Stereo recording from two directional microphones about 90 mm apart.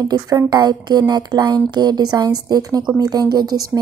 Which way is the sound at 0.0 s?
45° right (ahead or behind).